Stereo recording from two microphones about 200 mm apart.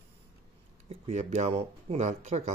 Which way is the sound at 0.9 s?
35° right (ahead or behind).